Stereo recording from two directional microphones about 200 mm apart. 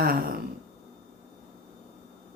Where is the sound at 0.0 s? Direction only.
45° right (ahead or behind).